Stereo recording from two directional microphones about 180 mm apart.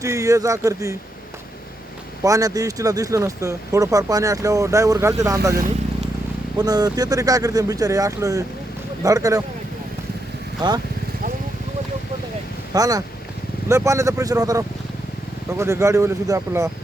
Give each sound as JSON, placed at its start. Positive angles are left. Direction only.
{"t": 0.0, "sound": "speech", "side_deg": -15}
{"t": 2.2, "sound": "speech", "side_deg": -20}
{"t": 6.6, "sound": "speech", "side_deg": -20}
{"t": 10.6, "sound": "speech", "side_deg": -25}
{"t": 12.7, "sound": "speech", "side_deg": -20}